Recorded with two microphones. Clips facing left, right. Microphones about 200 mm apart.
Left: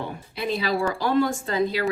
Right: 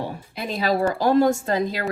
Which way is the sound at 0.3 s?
45° right (ahead or behind).